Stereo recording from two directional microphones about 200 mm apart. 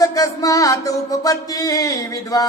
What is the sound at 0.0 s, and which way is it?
Music, 15° left (ahead or behind).